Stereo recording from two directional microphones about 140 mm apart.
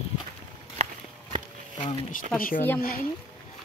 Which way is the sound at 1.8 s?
50° left (ahead or behind).